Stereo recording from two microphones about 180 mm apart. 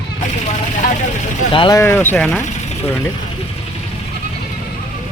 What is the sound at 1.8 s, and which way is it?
Speech, 15° left (ahead or behind).